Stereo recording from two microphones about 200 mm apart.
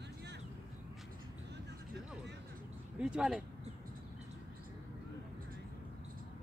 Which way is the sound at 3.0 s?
5° right (ahead or behind).